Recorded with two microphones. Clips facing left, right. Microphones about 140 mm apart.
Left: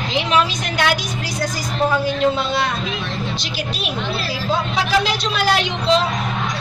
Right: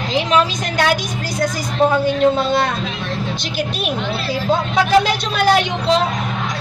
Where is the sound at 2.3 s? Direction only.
50° right (ahead or behind).